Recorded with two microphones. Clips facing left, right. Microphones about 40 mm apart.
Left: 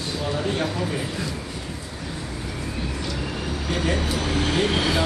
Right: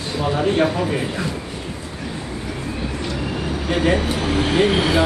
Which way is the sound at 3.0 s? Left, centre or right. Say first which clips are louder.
Right 4 dB; centre.